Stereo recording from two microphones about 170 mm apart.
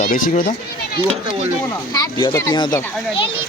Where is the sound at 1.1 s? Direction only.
35° right (ahead or behind).